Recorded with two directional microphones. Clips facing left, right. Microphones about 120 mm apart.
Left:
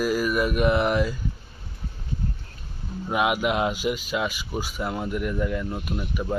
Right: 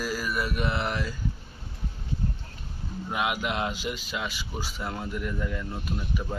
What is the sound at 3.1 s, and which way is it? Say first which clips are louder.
Speech: left 6 dB; 20° left (ahead or behind).